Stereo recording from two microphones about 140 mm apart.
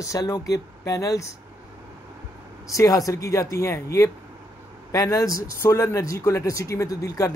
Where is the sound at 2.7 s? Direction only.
25° left (ahead or behind).